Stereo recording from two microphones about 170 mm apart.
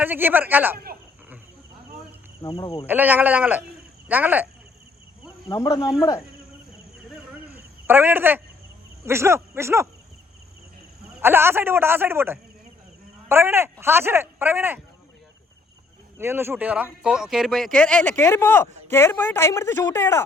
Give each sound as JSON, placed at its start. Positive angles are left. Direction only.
{"t": 0.0, "sound": "speech", "side_deg": -10}
{"t": 2.4, "sound": "speech", "side_deg": 25}
{"t": 2.8, "sound": "speech", "side_deg": -10}
{"t": 5.5, "sound": "speech", "side_deg": 20}
{"t": 7.5, "sound": "cricket", "side_deg": -10}
{"t": 9.0, "sound": "speech", "side_deg": -15}
{"t": 11.2, "sound": "speech", "side_deg": -15}
{"t": 16.1, "sound": "speech", "side_deg": -15}